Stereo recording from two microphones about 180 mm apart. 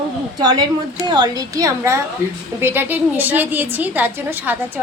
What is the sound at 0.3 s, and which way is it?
A woman's voice, 20° right (ahead or behind).